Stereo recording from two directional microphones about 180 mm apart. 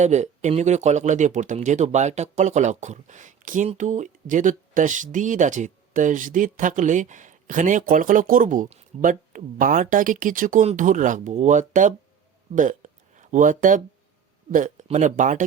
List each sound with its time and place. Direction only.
0.0 s speech: 40° right (ahead or behind)
12.5 s a sound: 45° right (ahead or behind)
14.5 s speech: 45° right (ahead or behind)